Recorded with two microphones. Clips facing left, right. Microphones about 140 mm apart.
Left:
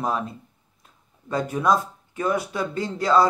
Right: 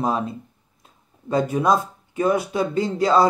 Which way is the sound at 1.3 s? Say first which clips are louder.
Right 3 dB; 20° right (ahead or behind).